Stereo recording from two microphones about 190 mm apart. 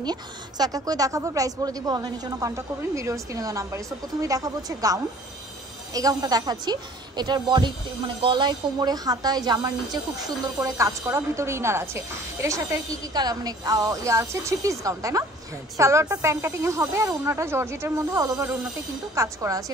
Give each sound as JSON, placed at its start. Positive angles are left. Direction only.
{"t": 0.0, "sound": "a woman's voice", "side_deg": -20}